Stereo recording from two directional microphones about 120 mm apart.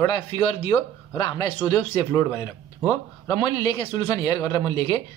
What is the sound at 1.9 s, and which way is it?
A man's voice, 25° left (ahead or behind).